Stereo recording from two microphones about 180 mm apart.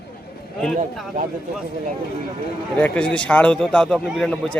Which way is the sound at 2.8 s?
5° left (ahead or behind).